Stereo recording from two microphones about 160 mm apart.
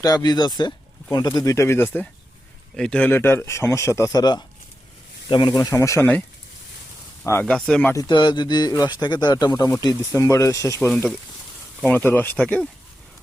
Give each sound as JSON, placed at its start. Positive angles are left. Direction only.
{"t": 0.0, "sound": "speech", "side_deg": 25}
{"t": 7.4, "sound": "speech", "side_deg": 5}
{"t": 7.9, "sound": "speech", "side_deg": 30}
{"t": 10.8, "sound": "speech", "side_deg": 5}